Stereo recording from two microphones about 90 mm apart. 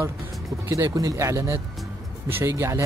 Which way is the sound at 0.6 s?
35° right (ahead or behind).